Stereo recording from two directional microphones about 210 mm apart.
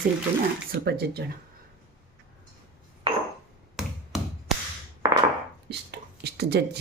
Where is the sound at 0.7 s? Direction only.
50° right (ahead or behind).